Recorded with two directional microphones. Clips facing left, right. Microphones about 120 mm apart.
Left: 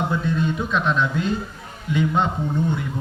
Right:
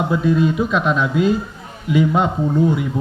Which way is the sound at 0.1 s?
5° right (ahead or behind).